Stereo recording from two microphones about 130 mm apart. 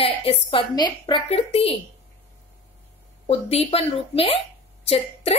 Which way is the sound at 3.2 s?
50° left (ahead or behind).